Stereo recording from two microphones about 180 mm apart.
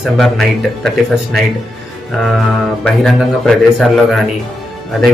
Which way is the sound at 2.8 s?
5° left (ahead or behind).